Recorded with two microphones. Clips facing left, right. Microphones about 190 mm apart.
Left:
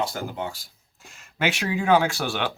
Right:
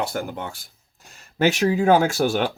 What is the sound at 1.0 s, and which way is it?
Speech, 35° right (ahead or behind).